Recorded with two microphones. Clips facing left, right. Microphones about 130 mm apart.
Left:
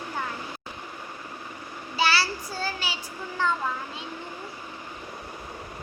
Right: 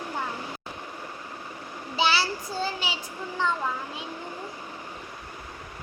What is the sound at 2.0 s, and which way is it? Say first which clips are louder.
A child's voice: even; 20° right (ahead or behind).